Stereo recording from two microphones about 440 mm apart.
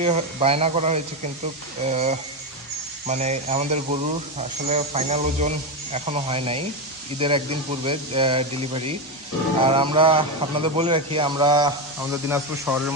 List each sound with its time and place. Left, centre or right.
0.0 s speech: centre